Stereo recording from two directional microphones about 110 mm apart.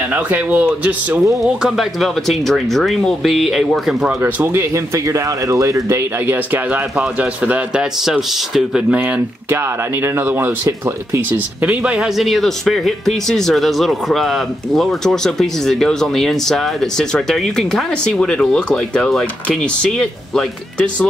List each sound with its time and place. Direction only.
0.1 s a man's voice: 15° right (ahead or behind)
1.4 s speech: centre (ahead or behind)
4.2 s a man's voice: 20° right (ahead or behind); by 8.8 s 5° right (ahead or behind)
8.9 s speech: 15° right (ahead or behind); by 21.1 s 10° left (ahead or behind)